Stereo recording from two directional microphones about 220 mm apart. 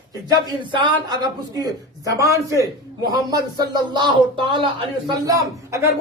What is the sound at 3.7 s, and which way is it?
A man's voice, 20° right (ahead or behind).